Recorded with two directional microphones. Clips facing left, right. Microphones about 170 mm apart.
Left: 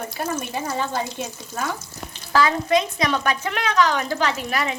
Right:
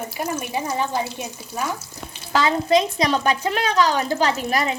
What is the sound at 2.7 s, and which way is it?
Speech, 35° right (ahead or behind).